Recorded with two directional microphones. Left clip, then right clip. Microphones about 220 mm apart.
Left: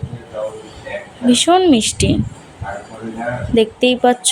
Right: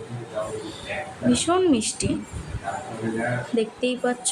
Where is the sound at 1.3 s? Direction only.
25° left (ahead or behind).